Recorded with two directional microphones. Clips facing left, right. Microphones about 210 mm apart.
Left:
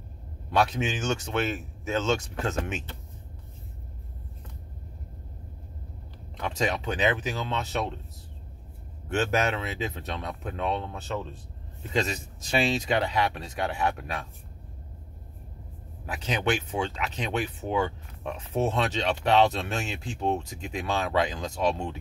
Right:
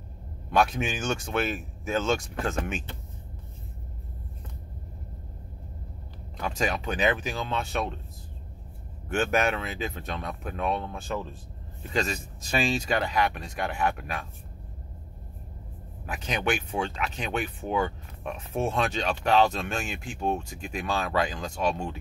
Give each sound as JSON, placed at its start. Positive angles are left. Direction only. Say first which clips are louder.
{"t": 0.6, "sound": "speech", "louder": "even", "side_deg": 25}
{"t": 6.6, "sound": "speech", "louder": "even", "side_deg": 25}
{"t": 9.1, "sound": "speech", "louder": "right 1 dB", "side_deg": 20}
{"t": 11.9, "sound": "speech", "louder": "left 1 dB", "side_deg": 20}
{"t": 16.1, "sound": "speech", "louder": "left 1 dB", "side_deg": 25}